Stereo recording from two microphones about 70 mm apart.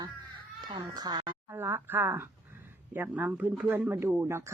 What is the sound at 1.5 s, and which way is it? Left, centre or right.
A woman's voice, right.